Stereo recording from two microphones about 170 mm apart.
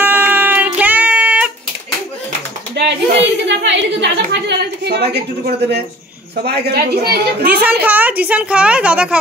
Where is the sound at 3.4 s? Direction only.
90° right.